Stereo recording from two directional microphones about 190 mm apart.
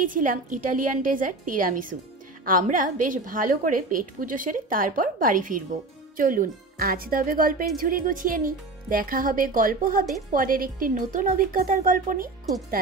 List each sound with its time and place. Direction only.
0.0 s speech: 45° right (ahead or behind)